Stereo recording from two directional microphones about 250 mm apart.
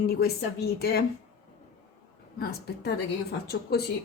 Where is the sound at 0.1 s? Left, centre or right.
Left.